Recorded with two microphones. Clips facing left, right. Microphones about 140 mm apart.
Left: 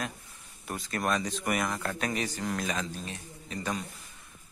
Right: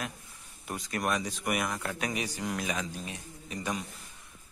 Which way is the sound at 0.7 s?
15° right (ahead or behind).